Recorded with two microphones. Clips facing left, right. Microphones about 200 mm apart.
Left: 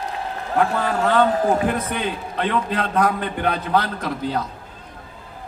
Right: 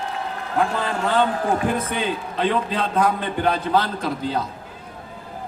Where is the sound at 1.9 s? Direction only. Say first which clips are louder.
Right 1 dB; 55° left (ahead or behind).